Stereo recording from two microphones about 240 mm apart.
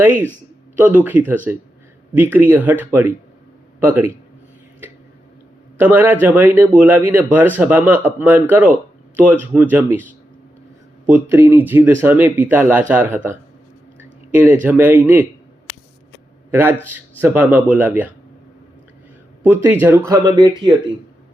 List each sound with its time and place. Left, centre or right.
0.0 s a man's voice: centre
5.7 s a man's voice: centre
14.6 s a man's voice: centre
16.5 s a man's voice: centre
19.5 s a man's voice: centre